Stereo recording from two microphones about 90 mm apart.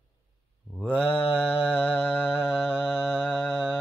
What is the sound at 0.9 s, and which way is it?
Mantra, 10° left (ahead or behind).